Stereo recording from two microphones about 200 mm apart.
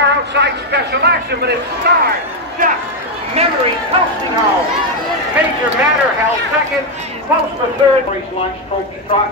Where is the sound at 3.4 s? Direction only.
30° right (ahead or behind).